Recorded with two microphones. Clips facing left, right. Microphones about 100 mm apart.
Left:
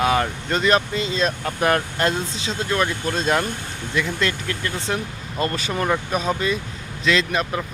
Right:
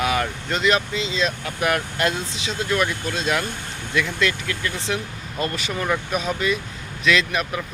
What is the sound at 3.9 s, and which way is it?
Speech, 30° left (ahead or behind).